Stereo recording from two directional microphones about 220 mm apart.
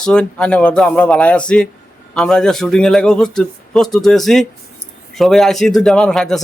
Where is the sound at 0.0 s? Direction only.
5° left (ahead or behind).